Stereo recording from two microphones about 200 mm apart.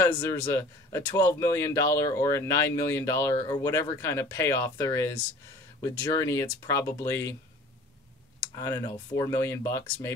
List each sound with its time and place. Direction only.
0.0 s speech: 10° left (ahead or behind)
8.5 s speech: 20° left (ahead or behind)